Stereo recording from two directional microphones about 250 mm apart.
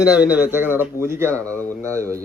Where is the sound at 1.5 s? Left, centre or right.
Centre.